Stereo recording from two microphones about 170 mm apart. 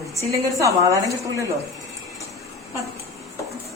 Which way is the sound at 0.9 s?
20° right (ahead or behind).